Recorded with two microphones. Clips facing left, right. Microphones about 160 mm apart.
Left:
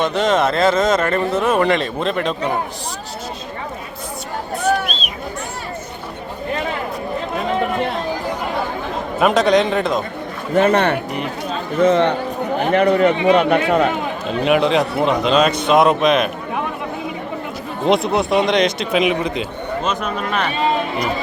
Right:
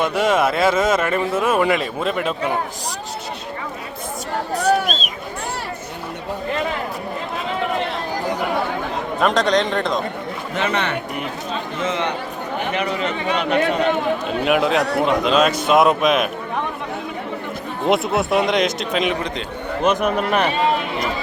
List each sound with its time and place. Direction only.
0.0 s speech: 10° right (ahead or behind)
4.5 s a sound: 40° right (ahead or behind)
9.2 s a man's voice: 5° left (ahead or behind)
10.5 s a man's voice: 50° left (ahead or behind)
14.4 s a man's voice: centre (ahead or behind)
17.8 s a man's voice: 5° right (ahead or behind)
19.8 s speech: 10° right (ahead or behind)